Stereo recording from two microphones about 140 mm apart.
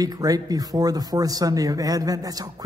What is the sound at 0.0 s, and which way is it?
A man's voice, 25° right (ahead or behind).